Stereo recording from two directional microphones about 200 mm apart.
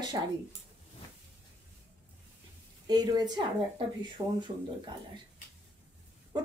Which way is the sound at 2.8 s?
20° right (ahead or behind).